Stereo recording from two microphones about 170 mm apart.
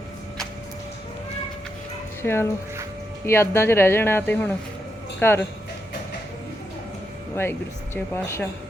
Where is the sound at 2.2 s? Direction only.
15° left (ahead or behind).